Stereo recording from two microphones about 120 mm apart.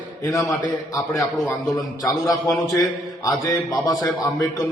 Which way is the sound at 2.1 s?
30° left (ahead or behind).